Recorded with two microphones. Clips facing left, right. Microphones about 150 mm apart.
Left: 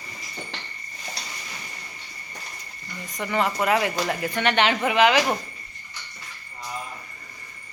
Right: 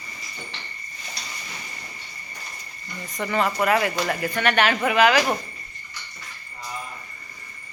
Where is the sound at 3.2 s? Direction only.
15° left (ahead or behind).